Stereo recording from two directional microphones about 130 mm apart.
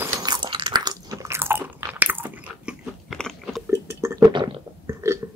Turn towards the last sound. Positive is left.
turn(degrees=-20)  # may be behind; listen again after turning